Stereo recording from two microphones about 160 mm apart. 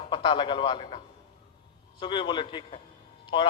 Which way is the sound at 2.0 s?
30° left (ahead or behind).